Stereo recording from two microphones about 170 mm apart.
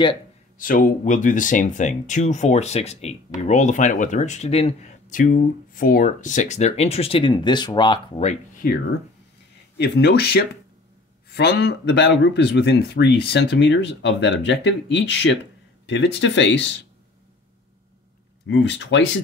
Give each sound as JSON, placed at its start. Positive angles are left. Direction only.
{"t": 0.6, "sound": "speech", "side_deg": 55}
{"t": 8.6, "sound": "speech", "side_deg": 60}
{"t": 9.8, "sound": "speech", "side_deg": 80}
{"t": 18.5, "sound": "speech", "side_deg": 90}